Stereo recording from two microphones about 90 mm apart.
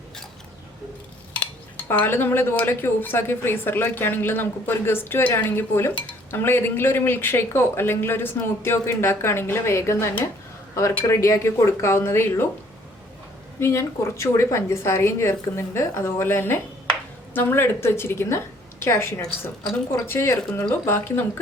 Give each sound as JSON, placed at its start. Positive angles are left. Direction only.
{"t": 1.9, "sound": "speech", "side_deg": 25}
{"t": 13.6, "sound": "speech", "side_deg": 30}